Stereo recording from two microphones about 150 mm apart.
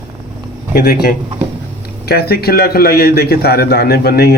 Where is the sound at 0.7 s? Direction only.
90° left.